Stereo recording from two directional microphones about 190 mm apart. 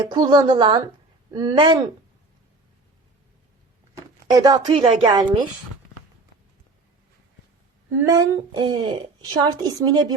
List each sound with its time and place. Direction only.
0.0 s speech: 25° right (ahead or behind)
4.3 s speech: 20° right (ahead or behind)
8.0 s speech: 20° right (ahead or behind)